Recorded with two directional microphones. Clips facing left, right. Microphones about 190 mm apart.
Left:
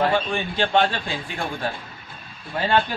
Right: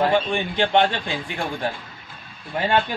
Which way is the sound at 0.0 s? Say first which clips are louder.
Right 2 dB; 20° right (ahead or behind).